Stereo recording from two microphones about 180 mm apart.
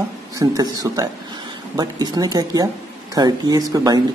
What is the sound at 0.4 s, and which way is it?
Speech, 20° right (ahead or behind).